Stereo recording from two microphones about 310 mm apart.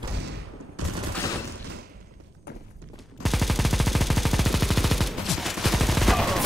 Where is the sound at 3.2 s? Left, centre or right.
Centre.